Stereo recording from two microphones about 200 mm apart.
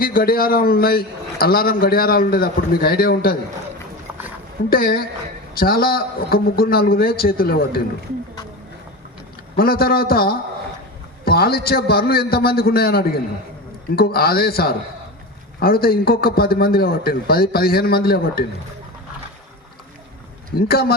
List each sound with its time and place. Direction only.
0.0 s a man's voice: 45° left (ahead or behind)
4.7 s a man's voice: 50° left (ahead or behind)
9.6 s a man's voice: 50° left (ahead or behind)
20.6 s a man's voice: 50° left (ahead or behind)